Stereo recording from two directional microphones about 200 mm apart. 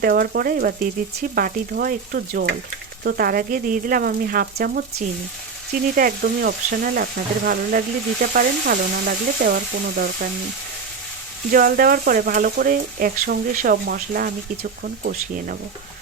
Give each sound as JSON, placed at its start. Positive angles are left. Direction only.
{"t": 0.0, "sound": "speech", "side_deg": -50}
{"t": 11.5, "sound": "speech", "side_deg": -45}